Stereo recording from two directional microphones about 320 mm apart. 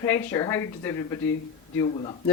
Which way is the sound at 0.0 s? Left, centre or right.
Centre.